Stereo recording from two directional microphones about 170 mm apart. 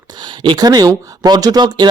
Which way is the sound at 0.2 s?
25° right (ahead or behind).